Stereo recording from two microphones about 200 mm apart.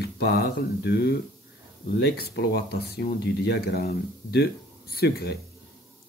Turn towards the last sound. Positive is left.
turn(degrees=50)  # may be behind; listen again after turning